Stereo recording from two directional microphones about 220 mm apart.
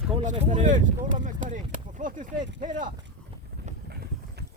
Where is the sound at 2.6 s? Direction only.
35° right (ahead or behind).